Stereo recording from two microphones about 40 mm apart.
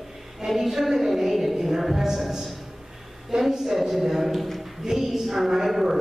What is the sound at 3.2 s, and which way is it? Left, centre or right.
A woman's voice, centre.